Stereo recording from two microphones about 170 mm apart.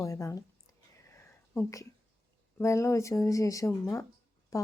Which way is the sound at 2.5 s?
15° left (ahead or behind).